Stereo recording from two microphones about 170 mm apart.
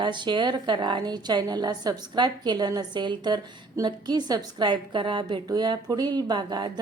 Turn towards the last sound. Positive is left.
turn(degrees=-25)  # may be behind; listen again after turning